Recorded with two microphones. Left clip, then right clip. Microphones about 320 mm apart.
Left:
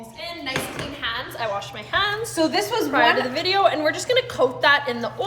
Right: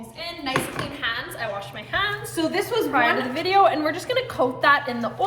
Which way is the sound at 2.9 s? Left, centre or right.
Centre.